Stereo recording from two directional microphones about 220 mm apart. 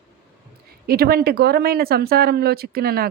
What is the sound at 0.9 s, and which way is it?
Speech, 45° right (ahead or behind).